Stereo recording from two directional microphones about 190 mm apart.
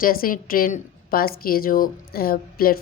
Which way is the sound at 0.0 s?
50° left (ahead or behind).